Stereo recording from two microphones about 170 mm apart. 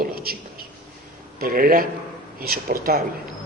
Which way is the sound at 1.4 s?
60° right (ahead or behind).